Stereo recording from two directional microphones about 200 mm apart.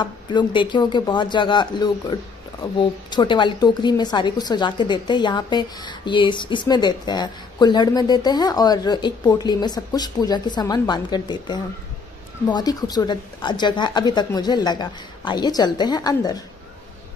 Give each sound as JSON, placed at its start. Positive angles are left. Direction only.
{"t": 0.0, "sound": "a woman's voice", "side_deg": 20}